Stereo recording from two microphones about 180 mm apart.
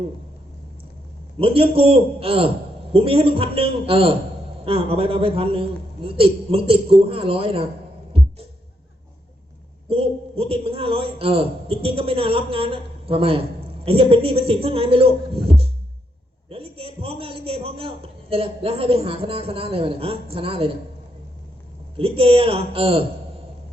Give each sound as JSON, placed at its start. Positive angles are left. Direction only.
{"t": 1.4, "sound": "a man's voice", "side_deg": -30}
{"t": 9.9, "sound": "a man's voice", "side_deg": -30}
{"t": 16.5, "sound": "a man's voice", "side_deg": -30}
{"t": 21.9, "sound": "a man's voice", "side_deg": -30}